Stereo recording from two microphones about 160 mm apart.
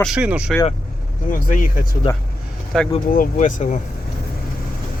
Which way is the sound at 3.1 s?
60° left (ahead or behind).